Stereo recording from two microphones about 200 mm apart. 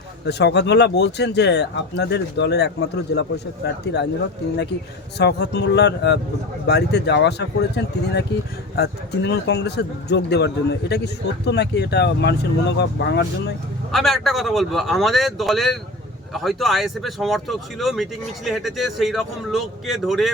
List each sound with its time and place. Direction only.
0.3 s a man's voice: 55° left (ahead or behind)
5.1 s a man's voice: 55° left (ahead or behind)
13.9 s speech: centre (ahead or behind)